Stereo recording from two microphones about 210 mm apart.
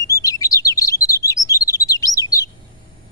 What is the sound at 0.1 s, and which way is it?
Chirp, 15° left (ahead or behind).